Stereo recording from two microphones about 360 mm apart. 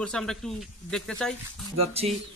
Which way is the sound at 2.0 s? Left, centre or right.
Centre.